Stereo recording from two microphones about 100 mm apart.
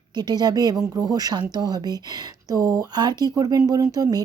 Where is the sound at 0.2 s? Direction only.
45° right (ahead or behind).